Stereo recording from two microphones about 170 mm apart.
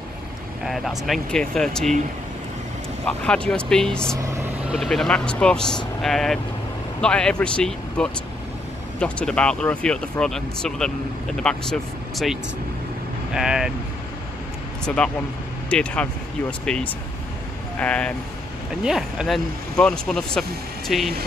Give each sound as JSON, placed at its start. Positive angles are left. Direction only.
{"t": 0.7, "sound": "speech", "side_deg": 0}
{"t": 3.1, "sound": "speech", "side_deg": 5}
{"t": 4.2, "sound": "speech", "side_deg": -15}
{"t": 4.6, "sound": "speech", "side_deg": 0}
{"t": 14.9, "sound": "speech", "side_deg": 5}
{"t": 18.8, "sound": "speech", "side_deg": -5}